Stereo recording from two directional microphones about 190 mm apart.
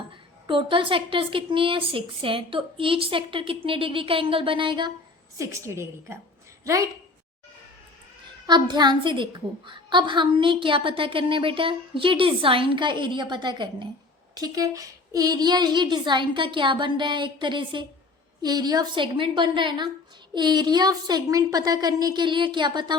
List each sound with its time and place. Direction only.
0.4 s a woman's voice: 25° right (ahead or behind)
5.4 s a woman's voice: 15° right (ahead or behind)
8.4 s a woman's voice: 20° right (ahead or behind)